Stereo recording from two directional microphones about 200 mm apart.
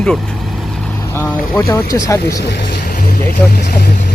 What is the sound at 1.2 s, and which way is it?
Speech, 15° left (ahead or behind).